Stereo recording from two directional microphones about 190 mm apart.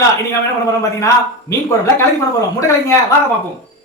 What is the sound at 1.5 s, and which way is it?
A man's voice, 15° left (ahead or behind).